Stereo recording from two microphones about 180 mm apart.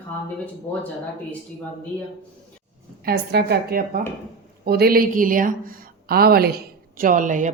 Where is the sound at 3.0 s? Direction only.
65° right (ahead or behind).